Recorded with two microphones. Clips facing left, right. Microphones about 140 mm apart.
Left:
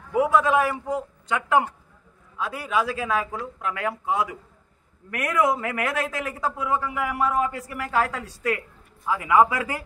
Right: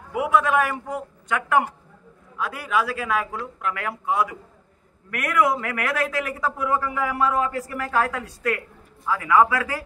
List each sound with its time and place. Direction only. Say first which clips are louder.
0.5 s a man's voice: left 1 dB; 30° left (ahead or behind)
6.9 s a woman's voice: right 2 dB; 10° left (ahead or behind)